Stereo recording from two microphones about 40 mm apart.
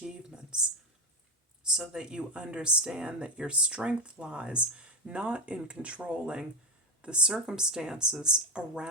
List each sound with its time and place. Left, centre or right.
1.9 s speech: right